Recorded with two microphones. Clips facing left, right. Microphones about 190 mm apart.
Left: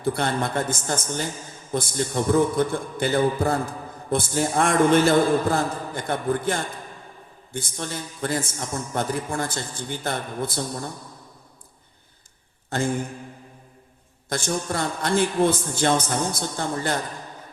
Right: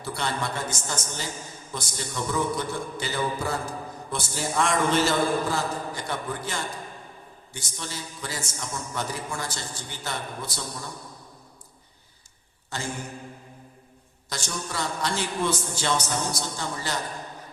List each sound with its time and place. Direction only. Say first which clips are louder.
0.0 s a man's voice: left 6 dB; 55° left (ahead or behind)
12.7 s a man's voice: left 9 dB; 55° left (ahead or behind)
14.3 s a man's voice: left 8 dB; 55° left (ahead or behind)